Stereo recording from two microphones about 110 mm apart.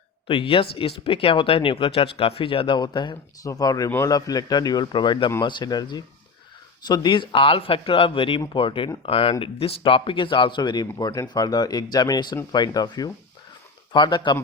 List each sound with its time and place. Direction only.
0.3 s speech: 55° left (ahead or behind)
3.4 s speech: 35° left (ahead or behind); by 8.9 s 50° left (ahead or behind)
9.0 s speech: 60° left (ahead or behind); by 14.3 s 45° left (ahead or behind)